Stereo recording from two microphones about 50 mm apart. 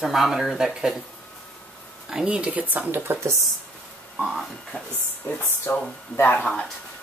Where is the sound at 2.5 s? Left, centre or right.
Right.